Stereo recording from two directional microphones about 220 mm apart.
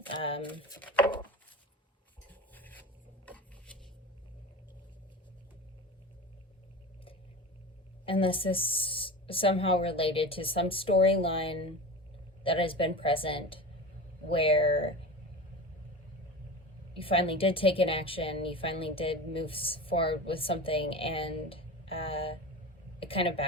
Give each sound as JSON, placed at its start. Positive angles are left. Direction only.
{"t": 0.2, "sound": "a woman's voice", "side_deg": 25}
{"t": 2.3, "sound": "rub", "side_deg": 10}
{"t": 3.2, "sound": "a sound", "side_deg": 5}
{"t": 8.0, "sound": "a woman's voice", "side_deg": 25}
{"t": 17.0, "sound": "a woman's voice", "side_deg": 25}